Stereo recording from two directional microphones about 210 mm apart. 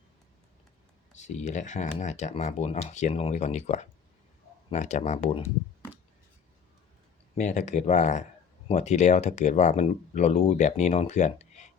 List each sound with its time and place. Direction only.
1.2 s speech: 35° left (ahead or behind)
7.3 s speech: 35° left (ahead or behind)